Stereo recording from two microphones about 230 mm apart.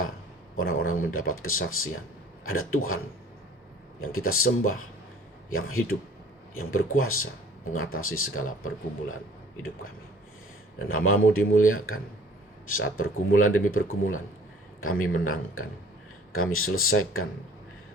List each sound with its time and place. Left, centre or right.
0.8 s speech: left
4.1 s speech: left
10.8 s speech: left